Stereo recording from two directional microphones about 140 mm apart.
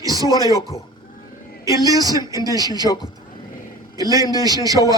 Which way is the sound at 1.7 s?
25° right (ahead or behind).